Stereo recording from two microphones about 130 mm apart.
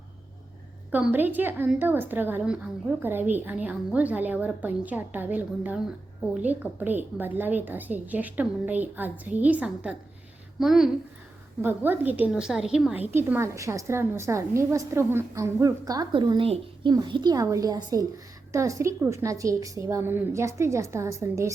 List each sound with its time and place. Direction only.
0.9 s a woman's voice: 10° right (ahead or behind)
11.6 s a woman's voice: 15° right (ahead or behind)